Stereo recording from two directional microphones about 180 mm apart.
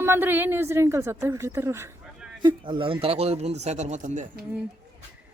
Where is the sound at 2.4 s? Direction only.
30° right (ahead or behind); by 4.5 s 45° right (ahead or behind).